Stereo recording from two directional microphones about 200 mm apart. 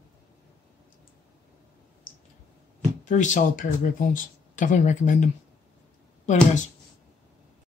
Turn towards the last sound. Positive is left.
turn(degrees=35)  # may be behind; listen again after turning